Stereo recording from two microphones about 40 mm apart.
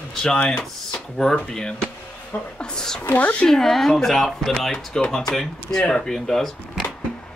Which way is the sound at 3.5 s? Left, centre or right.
Centre.